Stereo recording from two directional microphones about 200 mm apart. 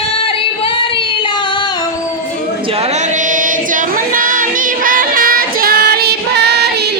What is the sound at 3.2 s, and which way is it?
Music, 40° right (ahead or behind).